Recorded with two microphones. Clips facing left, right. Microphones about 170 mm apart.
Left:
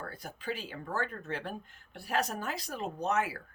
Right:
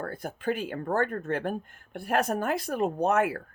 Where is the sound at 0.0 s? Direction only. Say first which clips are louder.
Right 9 dB; 55° right (ahead or behind).